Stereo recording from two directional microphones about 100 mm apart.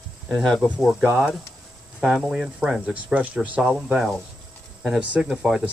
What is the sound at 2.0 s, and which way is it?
Speech, 5° right (ahead or behind).